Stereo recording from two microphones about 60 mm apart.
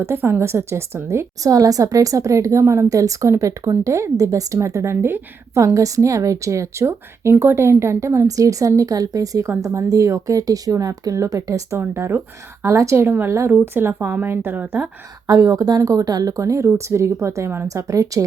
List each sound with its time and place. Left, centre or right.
0.2 s a woman's voice: right
1.4 s a woman's voice: right
4.9 s speech: right
5.5 s a woman's voice: right
9.7 s speech: right
11.8 s speech: right
12.6 s a woman's voice: right
15.3 s a woman's voice: right
17.7 s a woman's voice: right